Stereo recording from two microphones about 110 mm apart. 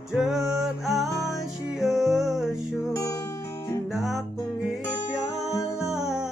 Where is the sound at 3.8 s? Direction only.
Centre (ahead or behind).